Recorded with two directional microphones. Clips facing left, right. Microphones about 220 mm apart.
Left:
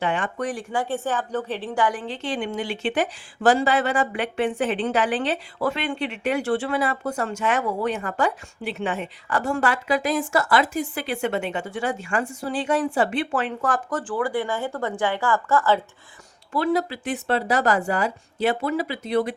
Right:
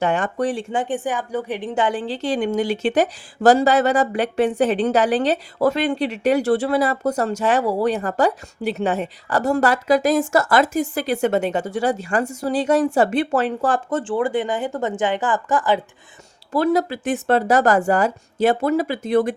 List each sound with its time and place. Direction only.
0.0 s speech: 45° right (ahead or behind); by 15.8 s 15° right (ahead or behind)
16.5 s speech: 40° right (ahead or behind)